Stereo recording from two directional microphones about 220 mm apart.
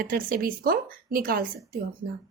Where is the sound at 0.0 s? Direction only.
40° right (ahead or behind).